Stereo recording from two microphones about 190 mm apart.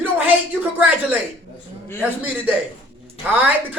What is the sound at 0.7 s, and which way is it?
Speech, 10° right (ahead or behind).